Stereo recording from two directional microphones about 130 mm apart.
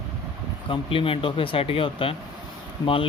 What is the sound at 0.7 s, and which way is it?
Speech, 45° left (ahead or behind).